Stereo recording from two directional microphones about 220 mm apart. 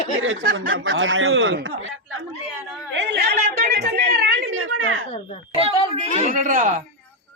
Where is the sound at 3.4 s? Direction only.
35° right (ahead or behind).